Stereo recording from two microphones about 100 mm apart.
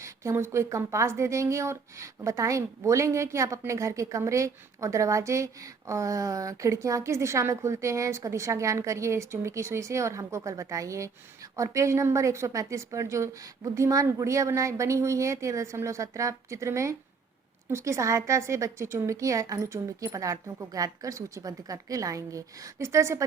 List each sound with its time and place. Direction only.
0.0 s a woman's voice: 30° right (ahead or behind)